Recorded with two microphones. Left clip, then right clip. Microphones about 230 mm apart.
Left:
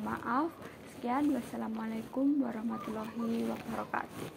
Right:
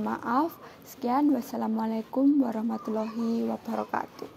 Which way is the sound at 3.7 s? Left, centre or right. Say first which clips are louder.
Right 6 dB; right.